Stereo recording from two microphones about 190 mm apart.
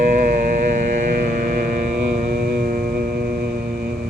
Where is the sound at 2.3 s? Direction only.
50° right (ahead or behind).